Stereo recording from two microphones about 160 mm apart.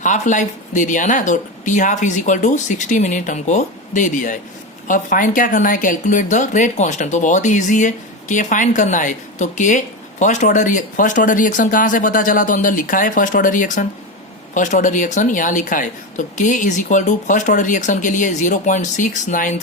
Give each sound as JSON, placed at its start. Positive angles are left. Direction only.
{"t": 0.0, "sound": "speech", "side_deg": 50}